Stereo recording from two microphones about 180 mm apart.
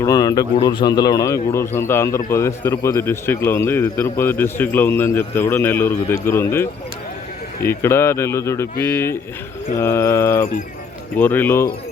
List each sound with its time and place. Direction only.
0.0 s a man's voice: 20° left (ahead or behind)